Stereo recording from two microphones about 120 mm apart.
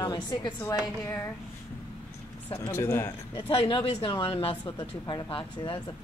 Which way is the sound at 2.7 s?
20° left (ahead or behind).